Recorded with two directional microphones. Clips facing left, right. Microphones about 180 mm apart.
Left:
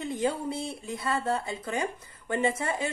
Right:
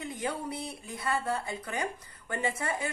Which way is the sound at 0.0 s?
25° left (ahead or behind).